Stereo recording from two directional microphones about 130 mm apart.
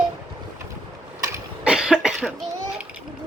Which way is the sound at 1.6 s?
5° right (ahead or behind).